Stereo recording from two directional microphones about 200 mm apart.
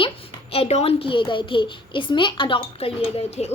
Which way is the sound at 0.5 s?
30° left (ahead or behind).